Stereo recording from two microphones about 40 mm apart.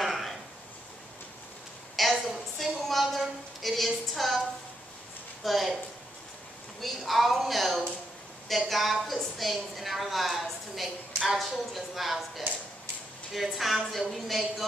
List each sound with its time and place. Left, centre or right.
0.0 s a sound: centre
2.0 s a woman's voice: centre
5.4 s a woman's voice: centre
6.8 s a woman's voice: centre